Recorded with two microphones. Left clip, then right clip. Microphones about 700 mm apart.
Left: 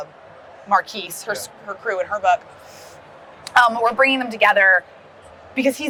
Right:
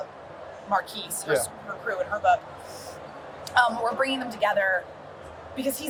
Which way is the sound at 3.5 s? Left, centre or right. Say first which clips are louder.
Left 7 dB; left.